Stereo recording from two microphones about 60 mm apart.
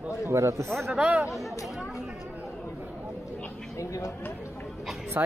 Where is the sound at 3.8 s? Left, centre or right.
Left.